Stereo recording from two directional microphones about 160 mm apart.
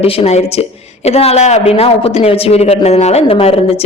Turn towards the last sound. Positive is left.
turn(degrees=40)  # may be behind; listen again after turning